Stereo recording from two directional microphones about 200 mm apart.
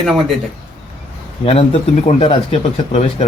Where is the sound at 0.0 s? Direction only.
Centre (ahead or behind).